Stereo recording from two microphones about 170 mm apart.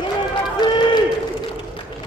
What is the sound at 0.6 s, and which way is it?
Run, 30° left (ahead or behind).